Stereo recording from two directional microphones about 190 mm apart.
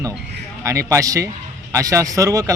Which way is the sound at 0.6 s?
15° right (ahead or behind).